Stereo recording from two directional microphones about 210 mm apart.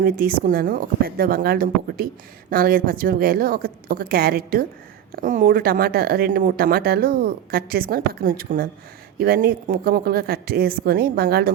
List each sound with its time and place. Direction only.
0.0 s speech: 45° right (ahead or behind)